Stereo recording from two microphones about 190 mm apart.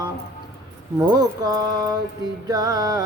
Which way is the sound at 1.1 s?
20° right (ahead or behind).